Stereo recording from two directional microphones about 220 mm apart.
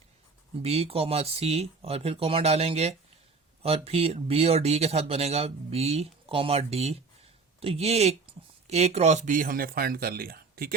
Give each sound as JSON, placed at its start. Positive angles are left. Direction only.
{"t": 0.6, "sound": "speech", "side_deg": -30}